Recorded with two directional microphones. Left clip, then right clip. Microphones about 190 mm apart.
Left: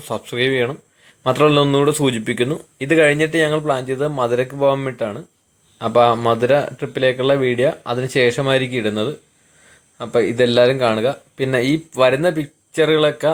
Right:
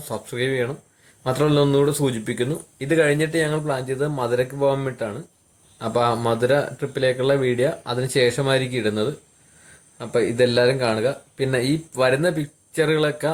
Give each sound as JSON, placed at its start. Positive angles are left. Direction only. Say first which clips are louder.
{"t": 0.1, "sound": "speech", "louder": "left 6 dB", "side_deg": 15}